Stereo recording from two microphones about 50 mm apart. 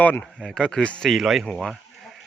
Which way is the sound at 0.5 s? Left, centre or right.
Centre.